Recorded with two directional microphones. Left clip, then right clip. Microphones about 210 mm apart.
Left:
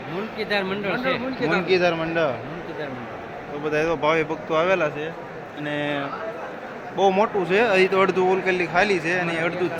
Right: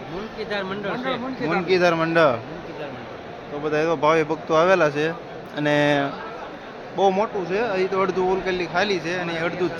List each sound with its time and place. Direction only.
0.3 s speech: 30° left (ahead or behind)
1.5 s speech: 5° right (ahead or behind)
3.7 s speech: 5° right (ahead or behind)
5.6 s speech: 25° right (ahead or behind)
6.9 s a man's voice: centre (ahead or behind)
7.2 s speech: 15° left (ahead or behind)